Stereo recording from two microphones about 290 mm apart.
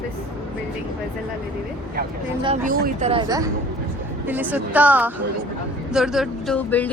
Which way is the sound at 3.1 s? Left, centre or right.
Centre.